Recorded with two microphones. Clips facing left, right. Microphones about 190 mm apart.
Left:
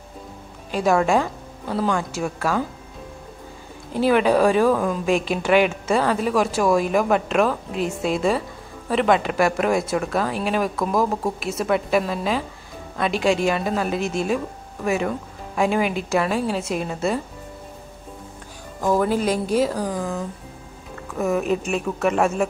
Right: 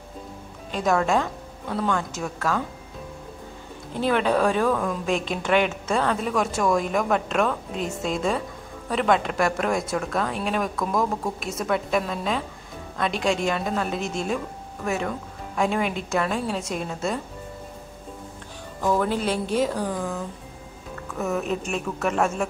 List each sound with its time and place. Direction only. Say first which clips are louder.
0.7 s a woman's voice: left 3 dB; 10° left (ahead or behind)
3.9 s a woman's voice: left 4 dB; 10° left (ahead or behind)
18.8 s a woman's voice: left 3 dB; 10° left (ahead or behind)
19.3 s a woman's voice: left 3 dB; 40° left (ahead or behind)
19.6 s a woman's voice: left 2 dB; 10° left (ahead or behind)
21.2 s a woman's voice: left 5 dB; 10° left (ahead or behind)